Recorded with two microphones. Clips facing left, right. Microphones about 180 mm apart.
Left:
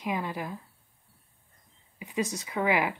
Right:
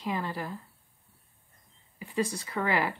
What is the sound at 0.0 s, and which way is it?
Speech, 15° left (ahead or behind).